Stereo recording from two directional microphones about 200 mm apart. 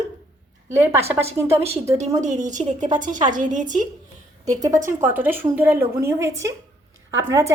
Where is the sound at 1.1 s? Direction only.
30° right (ahead or behind).